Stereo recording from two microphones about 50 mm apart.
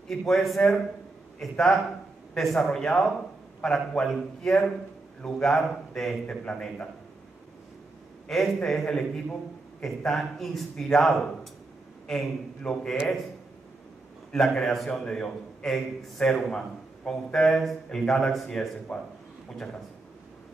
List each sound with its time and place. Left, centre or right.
0.1 s a man's voice: centre
1.6 s a man's voice: centre
2.8 s a man's voice: centre
6.2 s a man's voice: left
8.3 s a man's voice: centre
14.3 s a man's voice: centre
17.8 s a man's voice: centre